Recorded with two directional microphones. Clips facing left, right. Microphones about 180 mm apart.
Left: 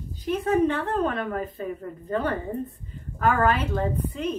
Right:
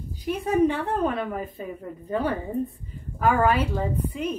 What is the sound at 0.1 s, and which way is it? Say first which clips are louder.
A woman's voice: left 1 dB; 10° right (ahead or behind).